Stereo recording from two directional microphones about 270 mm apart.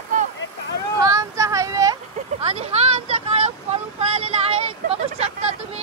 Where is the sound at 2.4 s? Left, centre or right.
Right.